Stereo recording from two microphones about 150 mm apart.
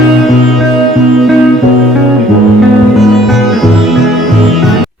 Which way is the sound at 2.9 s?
Centre (ahead or behind).